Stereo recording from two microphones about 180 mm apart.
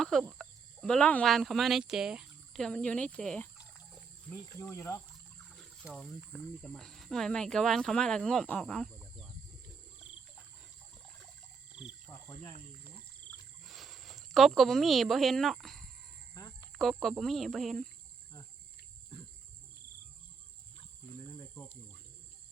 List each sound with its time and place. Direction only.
0.0 s speech: centre (ahead or behind); by 5.0 s 15° left (ahead or behind)
5.5 s speech: 5° left (ahead or behind)
11.7 s cricket: 5° right (ahead or behind)
13.2 s a sound: centre (ahead or behind)
16.7 s speech: centre (ahead or behind)
21.3 s cricket: 15° left (ahead or behind)